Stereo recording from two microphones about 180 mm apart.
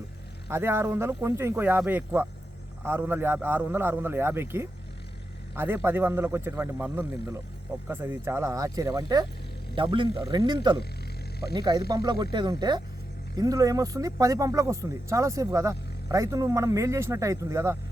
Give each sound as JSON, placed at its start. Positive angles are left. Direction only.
{"t": 0.5, "sound": "speech", "side_deg": -15}